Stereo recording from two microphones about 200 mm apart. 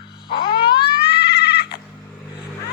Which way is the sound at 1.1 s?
55° left (ahead or behind).